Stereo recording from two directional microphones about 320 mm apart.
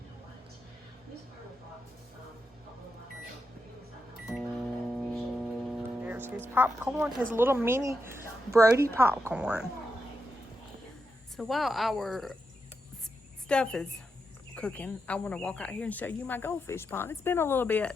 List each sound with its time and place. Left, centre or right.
4.3 s microwave oven: centre
7.3 s speech: centre
11.3 s speech: centre
13.5 s speech: centre